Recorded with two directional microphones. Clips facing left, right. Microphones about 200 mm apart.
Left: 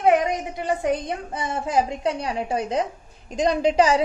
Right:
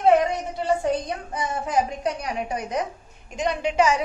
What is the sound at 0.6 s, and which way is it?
A woman's voice, 20° left (ahead or behind).